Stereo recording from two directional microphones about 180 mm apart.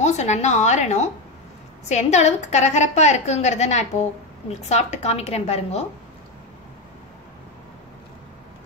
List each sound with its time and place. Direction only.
0.0 s a woman's voice: 40° left (ahead or behind)